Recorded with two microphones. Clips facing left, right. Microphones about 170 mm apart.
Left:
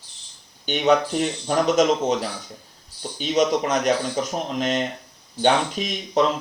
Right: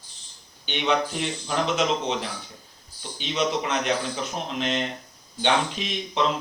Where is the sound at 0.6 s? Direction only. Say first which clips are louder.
Left 6 dB; 45° left (ahead or behind).